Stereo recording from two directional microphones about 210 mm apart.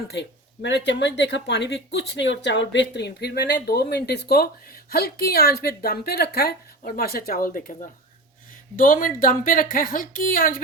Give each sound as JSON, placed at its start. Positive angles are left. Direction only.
{"t": 0.1, "sound": "a woman's voice", "side_deg": 55}